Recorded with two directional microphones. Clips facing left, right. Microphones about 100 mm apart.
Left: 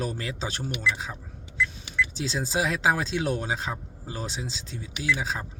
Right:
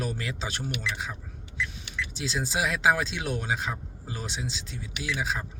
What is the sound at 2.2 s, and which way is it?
Speech, 30° left (ahead or behind).